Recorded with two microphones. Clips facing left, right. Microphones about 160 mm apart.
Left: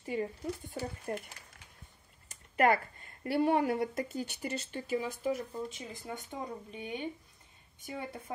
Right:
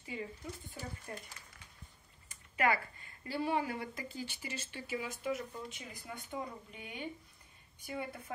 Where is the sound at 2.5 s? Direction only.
50° left (ahead or behind).